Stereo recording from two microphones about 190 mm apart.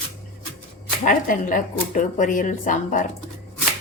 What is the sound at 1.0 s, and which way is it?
Speech, 45° left (ahead or behind).